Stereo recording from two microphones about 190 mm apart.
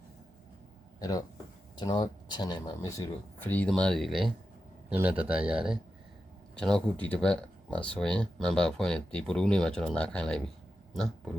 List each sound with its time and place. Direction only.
0.9 s speech: 20° left (ahead or behind); by 11.3 s 5° left (ahead or behind)